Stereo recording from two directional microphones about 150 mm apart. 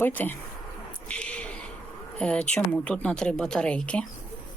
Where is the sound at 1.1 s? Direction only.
5° left (ahead or behind).